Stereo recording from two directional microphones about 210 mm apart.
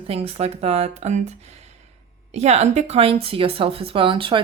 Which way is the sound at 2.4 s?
30° right (ahead or behind).